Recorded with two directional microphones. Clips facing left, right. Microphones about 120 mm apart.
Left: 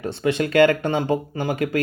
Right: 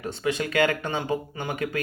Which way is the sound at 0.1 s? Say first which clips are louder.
Left 6 dB; 60° left (ahead or behind).